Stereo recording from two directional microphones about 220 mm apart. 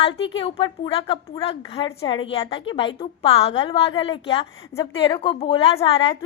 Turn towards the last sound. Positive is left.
turn(degrees=25)  # may be behind; listen again after turning